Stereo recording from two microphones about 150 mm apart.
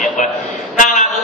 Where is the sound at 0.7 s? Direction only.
60° left (ahead or behind).